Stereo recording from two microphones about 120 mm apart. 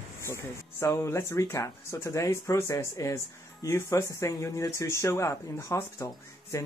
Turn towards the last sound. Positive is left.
turn(degrees=25)  # may be behind; listen again after turning